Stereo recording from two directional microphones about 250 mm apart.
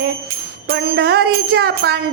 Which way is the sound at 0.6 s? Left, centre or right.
Right.